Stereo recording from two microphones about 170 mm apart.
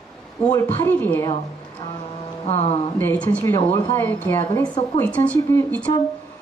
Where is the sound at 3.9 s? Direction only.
10° left (ahead or behind).